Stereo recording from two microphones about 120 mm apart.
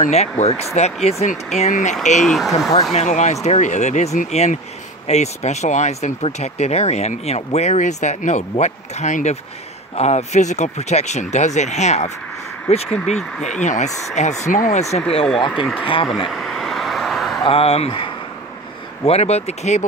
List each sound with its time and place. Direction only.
0.0 s speech: 65° left (ahead or behind)
1.0 s speech: 75° left (ahead or behind)
2.2 s speech: centre (ahead or behind)
2.9 s speech: 75° left (ahead or behind)
5.0 s speech: 70° left (ahead or behind)
9.9 s speech: 70° left (ahead or behind)
12.6 s speech: 55° left (ahead or behind)
12.9 s speech: 5° left (ahead or behind)
13.6 s speech: 75° left (ahead or behind); by 15.2 s 60° left (ahead or behind)
15.8 s speech: 50° left (ahead or behind)
16.3 s vehicle: 5° left (ahead or behind)
17.5 s speech: 55° left (ahead or behind)
19.0 s speech: 65° left (ahead or behind)